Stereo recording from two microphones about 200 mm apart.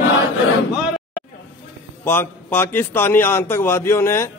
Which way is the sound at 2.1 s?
10° left (ahead or behind).